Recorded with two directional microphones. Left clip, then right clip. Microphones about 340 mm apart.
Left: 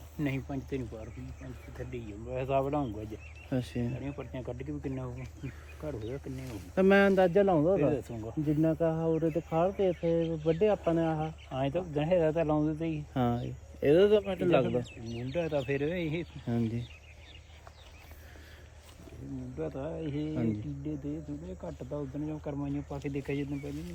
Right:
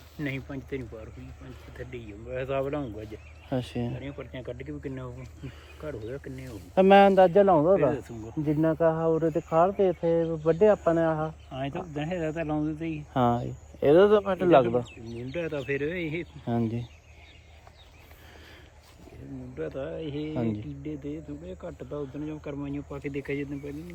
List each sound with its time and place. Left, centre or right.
0.2 s speech: centre
1.9 s speech: centre
3.5 s speech: centre
4.0 s speech: centre
6.7 s speech: centre
11.4 s speech: left
13.1 s speech: centre
15.3 s speech: centre
16.5 s speech: centre
19.5 s speech: centre
22.3 s speech: centre